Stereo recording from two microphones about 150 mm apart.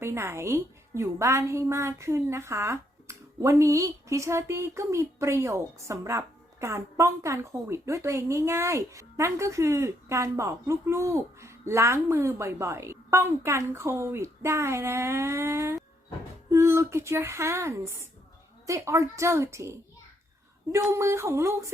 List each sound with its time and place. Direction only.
0.0 s a woman's voice: 15° right (ahead or behind)
20.7 s a woman's voice: 20° right (ahead or behind)